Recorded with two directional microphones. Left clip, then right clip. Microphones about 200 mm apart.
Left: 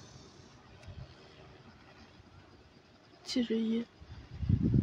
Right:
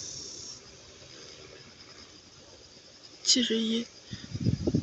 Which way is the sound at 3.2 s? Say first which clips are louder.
Right 8 dB; 5° left (ahead or behind).